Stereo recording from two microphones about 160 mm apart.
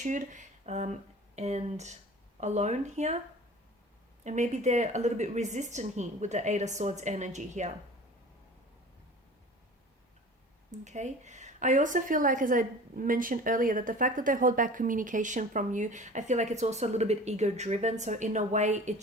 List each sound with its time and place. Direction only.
0.0 s a woman's voice: 50° right (ahead or behind)
4.2 s a woman's voice: 50° right (ahead or behind)
10.7 s a woman's voice: 45° right (ahead or behind)